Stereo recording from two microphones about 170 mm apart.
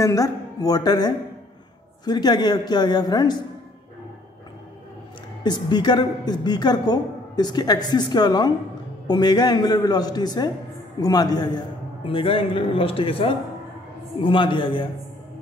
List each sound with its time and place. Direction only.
0.0 s a woman's voice: 20° left (ahead or behind)
5.4 s a woman's voice: 25° left (ahead or behind)